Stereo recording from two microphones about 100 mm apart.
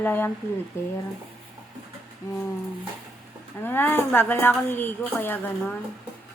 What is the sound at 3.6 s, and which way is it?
Speech, 20° left (ahead or behind).